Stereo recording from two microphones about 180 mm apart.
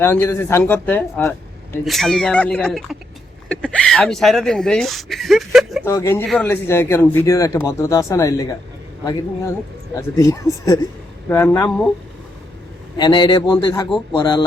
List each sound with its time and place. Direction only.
0.0 s speech: 10° left (ahead or behind)
5.8 s speech: 15° left (ahead or behind)
13.0 s a man's voice: 25° left (ahead or behind)